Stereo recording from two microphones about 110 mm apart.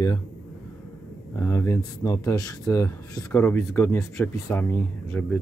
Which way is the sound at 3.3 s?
20° left (ahead or behind).